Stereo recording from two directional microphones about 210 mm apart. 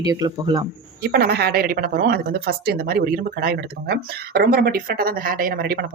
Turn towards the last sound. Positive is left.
turn(degrees=-50)  # may be behind; listen again after turning